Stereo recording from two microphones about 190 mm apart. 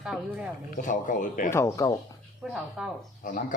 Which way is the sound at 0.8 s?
45° left (ahead or behind).